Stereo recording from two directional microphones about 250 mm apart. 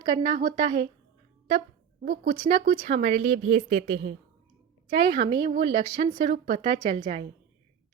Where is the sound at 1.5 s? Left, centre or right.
Right.